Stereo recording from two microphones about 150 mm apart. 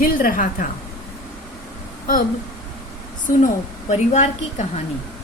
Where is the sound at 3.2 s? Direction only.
55° left (ahead or behind).